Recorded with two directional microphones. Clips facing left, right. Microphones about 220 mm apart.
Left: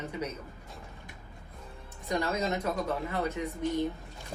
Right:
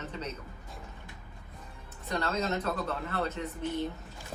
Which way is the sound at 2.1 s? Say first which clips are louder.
Left 1 dB; 15° left (ahead or behind).